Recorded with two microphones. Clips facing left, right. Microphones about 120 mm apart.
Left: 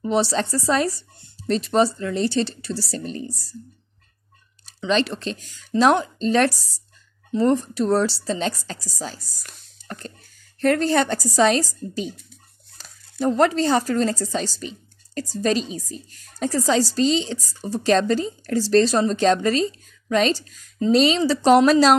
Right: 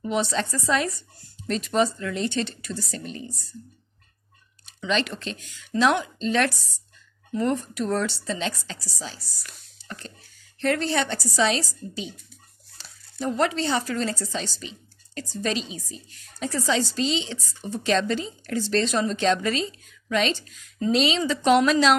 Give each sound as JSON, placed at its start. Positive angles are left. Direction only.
{"t": 0.0, "sound": "speech", "side_deg": 35}
{"t": 4.8, "sound": "a woman's voice", "side_deg": 35}